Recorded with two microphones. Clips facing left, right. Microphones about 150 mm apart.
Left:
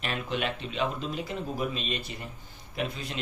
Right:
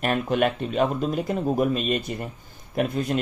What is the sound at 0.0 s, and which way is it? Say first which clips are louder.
A man's voice: right 9 dB; 50° right (ahead or behind).